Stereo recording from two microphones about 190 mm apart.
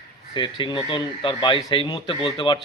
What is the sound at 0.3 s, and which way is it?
A man's voice, 25° left (ahead or behind).